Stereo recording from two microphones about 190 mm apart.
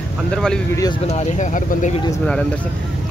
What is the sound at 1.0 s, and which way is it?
Speech, 35° left (ahead or behind).